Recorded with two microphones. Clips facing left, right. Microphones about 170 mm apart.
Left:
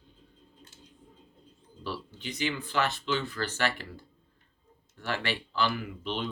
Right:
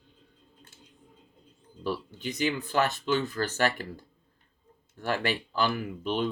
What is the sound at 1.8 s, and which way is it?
Speech, 45° right (ahead or behind).